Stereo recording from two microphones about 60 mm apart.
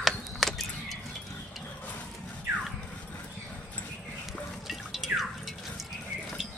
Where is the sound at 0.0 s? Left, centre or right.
Centre.